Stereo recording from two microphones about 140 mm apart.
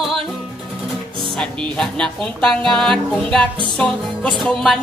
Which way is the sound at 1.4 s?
5° left (ahead or behind).